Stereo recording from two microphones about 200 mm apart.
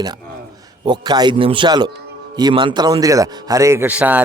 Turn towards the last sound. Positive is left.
turn(degrees=-5)  # may be behind; listen again after turning